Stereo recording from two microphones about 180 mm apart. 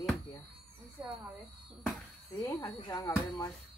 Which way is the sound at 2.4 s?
20° left (ahead or behind).